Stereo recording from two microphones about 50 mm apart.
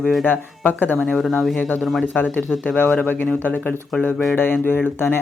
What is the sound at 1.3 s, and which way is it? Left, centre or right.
Speech, centre.